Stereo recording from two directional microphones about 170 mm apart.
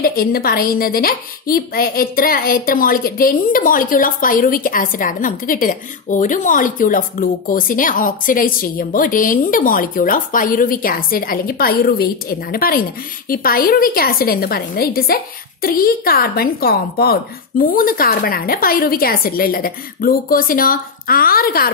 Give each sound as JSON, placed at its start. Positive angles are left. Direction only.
{"t": 0.0, "sound": "a woman's voice", "side_deg": 60}